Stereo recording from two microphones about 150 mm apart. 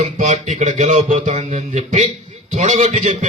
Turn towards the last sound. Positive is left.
turn(degrees=-50)  # may be behind; listen again after turning